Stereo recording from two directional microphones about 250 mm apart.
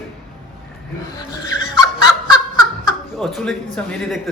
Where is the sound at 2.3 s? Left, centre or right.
Centre.